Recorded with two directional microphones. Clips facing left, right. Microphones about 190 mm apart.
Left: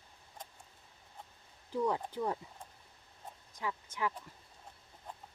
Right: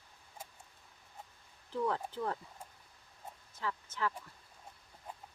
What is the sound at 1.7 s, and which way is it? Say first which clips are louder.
Speech: left 2 dB; 15° left (ahead or behind).